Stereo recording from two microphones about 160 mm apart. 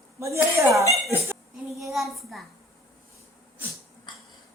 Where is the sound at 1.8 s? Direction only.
Centre (ahead or behind).